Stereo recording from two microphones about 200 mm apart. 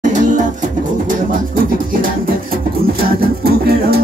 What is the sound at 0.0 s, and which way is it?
Music, 40° right (ahead or behind).